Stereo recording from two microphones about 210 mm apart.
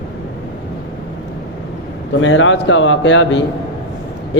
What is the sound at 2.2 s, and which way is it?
A man's voice, 65° left (ahead or behind).